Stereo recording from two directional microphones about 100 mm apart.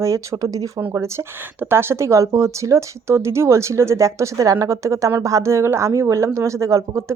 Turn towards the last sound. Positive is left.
turn(degrees=-30)  # may be behind; listen again after turning